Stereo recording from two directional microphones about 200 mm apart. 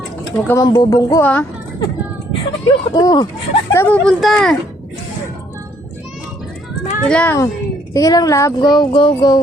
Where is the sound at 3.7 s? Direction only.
5° left (ahead or behind).